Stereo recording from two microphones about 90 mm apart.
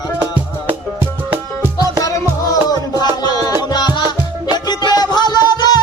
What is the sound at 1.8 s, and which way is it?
Music, 40° left (ahead or behind).